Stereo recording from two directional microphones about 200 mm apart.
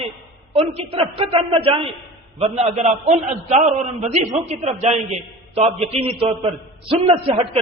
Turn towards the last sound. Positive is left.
turn(degrees=-30)  # may be behind; listen again after turning